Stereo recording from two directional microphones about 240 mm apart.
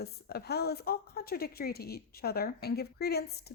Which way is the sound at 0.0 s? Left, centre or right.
Left.